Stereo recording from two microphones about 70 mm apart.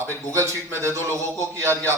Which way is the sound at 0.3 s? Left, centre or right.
Right.